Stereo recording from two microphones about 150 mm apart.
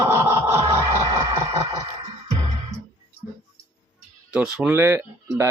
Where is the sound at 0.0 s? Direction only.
20° right (ahead or behind).